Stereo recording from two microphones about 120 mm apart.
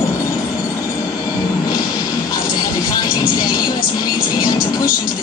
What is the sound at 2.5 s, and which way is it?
Vehicle, 30° left (ahead or behind).